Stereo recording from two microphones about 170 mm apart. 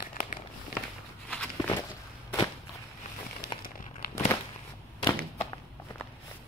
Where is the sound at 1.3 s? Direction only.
5° left (ahead or behind).